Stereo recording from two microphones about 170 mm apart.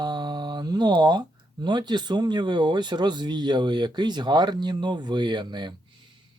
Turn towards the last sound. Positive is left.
turn(degrees=-25)  # may be behind; listen again after turning